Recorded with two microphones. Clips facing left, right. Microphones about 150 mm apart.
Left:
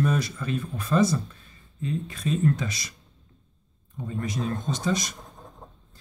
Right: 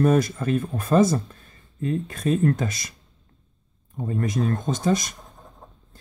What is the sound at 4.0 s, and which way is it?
Speech, 50° right (ahead or behind).